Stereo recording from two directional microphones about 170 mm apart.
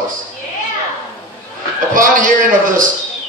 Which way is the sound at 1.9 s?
50° right (ahead or behind).